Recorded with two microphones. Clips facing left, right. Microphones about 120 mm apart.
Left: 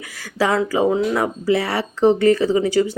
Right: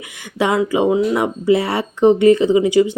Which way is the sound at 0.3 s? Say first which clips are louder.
Right 2 dB; 20° right (ahead or behind).